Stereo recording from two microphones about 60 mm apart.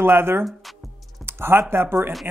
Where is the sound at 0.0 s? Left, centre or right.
Right.